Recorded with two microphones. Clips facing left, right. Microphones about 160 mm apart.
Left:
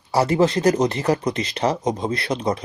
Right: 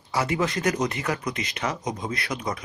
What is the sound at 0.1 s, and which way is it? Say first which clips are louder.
Speech: left 7 dB; 35° left (ahead or behind).